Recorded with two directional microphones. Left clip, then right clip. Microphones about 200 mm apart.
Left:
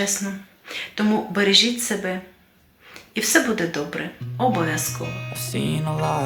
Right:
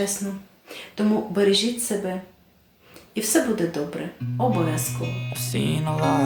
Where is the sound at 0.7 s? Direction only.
5° right (ahead or behind).